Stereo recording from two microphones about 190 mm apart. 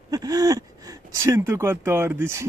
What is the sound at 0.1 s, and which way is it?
Speech, 20° right (ahead or behind).